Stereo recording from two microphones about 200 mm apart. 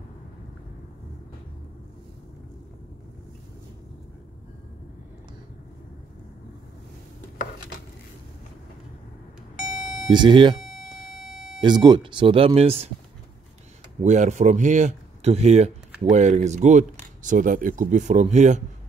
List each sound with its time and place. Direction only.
9.6 s vehicle: 5° right (ahead or behind)
10.0 s speech: 25° right (ahead or behind)
10.6 s beep: centre (ahead or behind)
11.6 s speech: 20° right (ahead or behind)
14.0 s speech: 35° right (ahead or behind)